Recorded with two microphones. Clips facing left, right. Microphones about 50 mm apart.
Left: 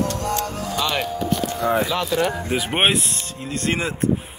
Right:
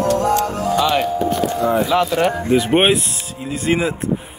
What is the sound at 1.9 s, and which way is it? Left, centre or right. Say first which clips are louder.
Speech: right 5 dB; right.